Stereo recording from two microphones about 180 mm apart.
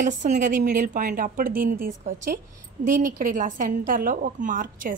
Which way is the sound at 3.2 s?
45° right (ahead or behind).